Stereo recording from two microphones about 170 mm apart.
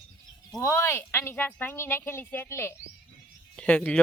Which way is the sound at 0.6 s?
15° left (ahead or behind).